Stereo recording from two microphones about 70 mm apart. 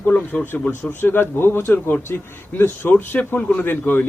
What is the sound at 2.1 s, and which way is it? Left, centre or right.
Speech, left.